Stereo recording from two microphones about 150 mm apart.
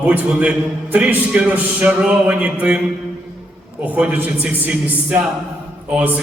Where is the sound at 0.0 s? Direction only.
10° right (ahead or behind).